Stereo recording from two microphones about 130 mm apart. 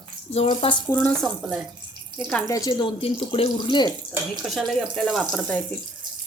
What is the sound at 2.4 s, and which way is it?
Speech, 25° left (ahead or behind).